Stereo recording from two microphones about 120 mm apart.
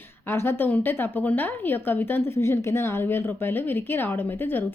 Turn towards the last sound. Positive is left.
turn(degrees=15)  # may be behind; listen again after turning